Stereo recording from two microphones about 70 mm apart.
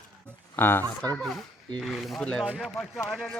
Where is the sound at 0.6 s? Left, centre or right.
Left.